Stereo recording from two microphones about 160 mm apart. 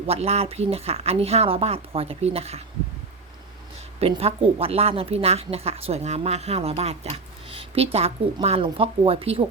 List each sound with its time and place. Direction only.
0.1 s speech: 40° right (ahead or behind)
4.0 s speech: 40° right (ahead or behind)